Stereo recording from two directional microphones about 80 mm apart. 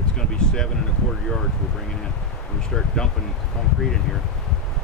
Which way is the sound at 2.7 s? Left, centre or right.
Centre.